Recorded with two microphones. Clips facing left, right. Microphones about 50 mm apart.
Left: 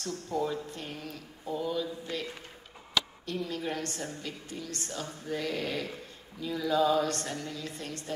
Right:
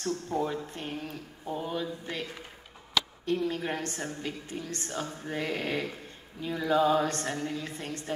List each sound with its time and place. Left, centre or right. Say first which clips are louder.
0.0 s speech: right 2 dB; right
3.3 s speech: right 4 dB; right